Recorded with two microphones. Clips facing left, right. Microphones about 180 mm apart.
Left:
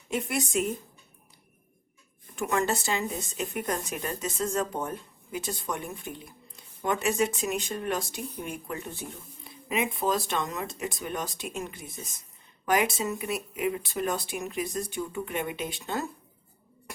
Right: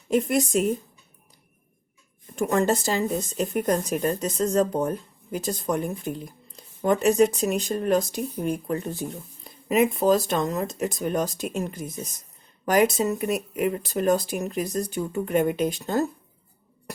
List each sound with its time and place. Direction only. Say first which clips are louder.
0.1 s speech: right 7 dB; 35° right (ahead or behind)
2.3 s speech: right 6 dB; 35° right (ahead or behind)